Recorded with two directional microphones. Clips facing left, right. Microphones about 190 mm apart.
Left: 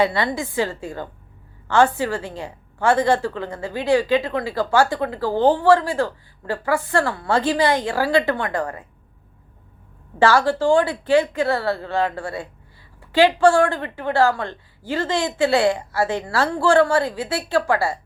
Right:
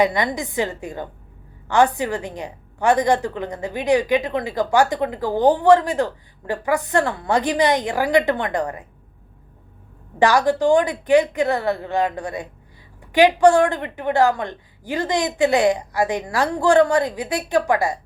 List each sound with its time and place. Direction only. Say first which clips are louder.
0.0 s a woman's voice: right 1 dB; 15° right (ahead or behind)
10.2 s a woman's voice: even; 15° right (ahead or behind)